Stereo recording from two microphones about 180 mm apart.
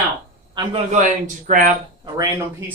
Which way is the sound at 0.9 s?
45° right (ahead or behind).